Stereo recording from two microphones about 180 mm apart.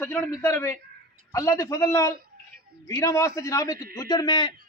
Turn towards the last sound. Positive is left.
turn(degrees=25)  # may be behind; listen again after turning